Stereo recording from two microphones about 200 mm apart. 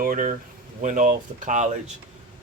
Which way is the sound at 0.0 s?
45° right (ahead or behind).